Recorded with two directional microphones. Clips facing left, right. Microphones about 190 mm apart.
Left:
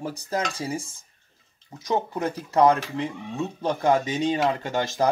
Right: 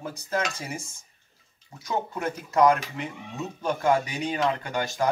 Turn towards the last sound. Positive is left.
turn(degrees=25)  # may be behind; listen again after turning